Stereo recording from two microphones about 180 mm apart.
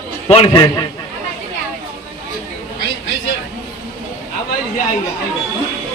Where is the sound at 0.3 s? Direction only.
30° left (ahead or behind).